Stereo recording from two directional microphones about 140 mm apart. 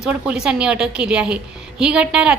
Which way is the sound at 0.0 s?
5° right (ahead or behind).